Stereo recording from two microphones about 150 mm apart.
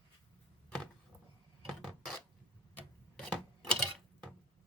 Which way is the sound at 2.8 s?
10° left (ahead or behind).